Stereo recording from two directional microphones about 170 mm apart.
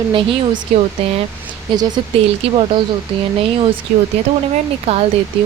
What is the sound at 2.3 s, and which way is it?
Speech, 35° right (ahead or behind).